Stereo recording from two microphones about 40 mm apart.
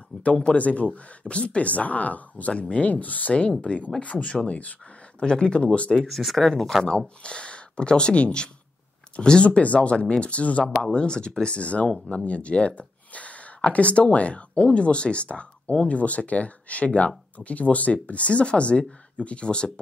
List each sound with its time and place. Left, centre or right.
0.2 s speech: left
2.5 s speech: left
2.9 s speech: left
4.0 s speech: left
5.2 s speech: left
5.9 s speech: centre
6.8 s speech: centre
7.2 s speech: left
10.6 s speech: centre